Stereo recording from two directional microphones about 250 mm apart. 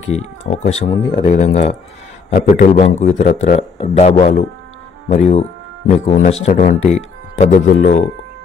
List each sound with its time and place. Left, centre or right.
0.1 s speech: left